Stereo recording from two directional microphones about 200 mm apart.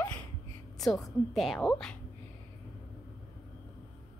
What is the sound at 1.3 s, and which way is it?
Speech, centre (ahead or behind).